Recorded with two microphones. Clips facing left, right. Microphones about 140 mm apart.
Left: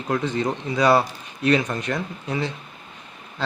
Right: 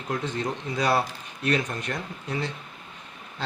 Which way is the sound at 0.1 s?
90° left.